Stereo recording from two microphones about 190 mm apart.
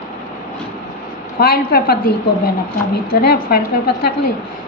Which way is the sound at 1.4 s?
50° left (ahead or behind).